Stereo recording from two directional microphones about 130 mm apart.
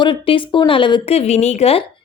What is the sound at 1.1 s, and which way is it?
Speech, 55° left (ahead or behind).